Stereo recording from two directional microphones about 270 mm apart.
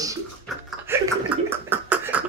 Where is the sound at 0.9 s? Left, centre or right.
Centre.